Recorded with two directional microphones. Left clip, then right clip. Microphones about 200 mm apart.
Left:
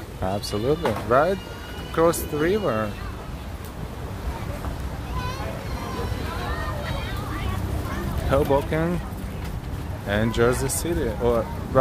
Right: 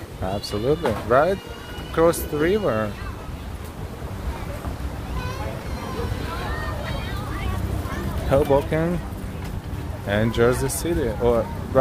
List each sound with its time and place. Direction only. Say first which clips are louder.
0.2 s speech: even; 5° left (ahead or behind)
8.3 s speech: right 2 dB; 10° right (ahead or behind)
10.0 s speech: right 2 dB; 5° right (ahead or behind)